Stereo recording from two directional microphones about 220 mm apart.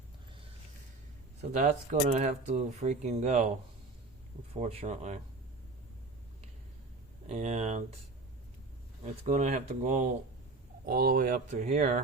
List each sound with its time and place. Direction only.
1.4 s speech: 30° right (ahead or behind)
4.5 s speech: 30° right (ahead or behind)
7.3 s speech: 30° right (ahead or behind)
9.2 s speech: 35° right (ahead or behind)
10.8 s speech: 40° right (ahead or behind)